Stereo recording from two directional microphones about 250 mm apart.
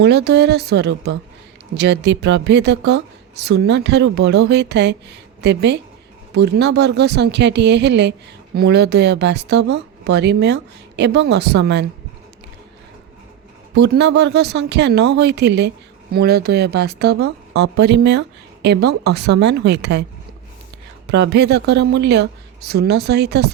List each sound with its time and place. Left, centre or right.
0.0 s a woman's voice: right
13.7 s a woman's voice: right
21.1 s a woman's voice: right